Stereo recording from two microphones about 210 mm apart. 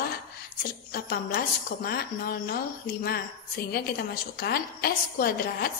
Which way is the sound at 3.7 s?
45° left (ahead or behind).